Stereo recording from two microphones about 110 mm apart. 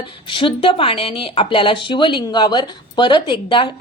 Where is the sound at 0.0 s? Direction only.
50° left (ahead or behind).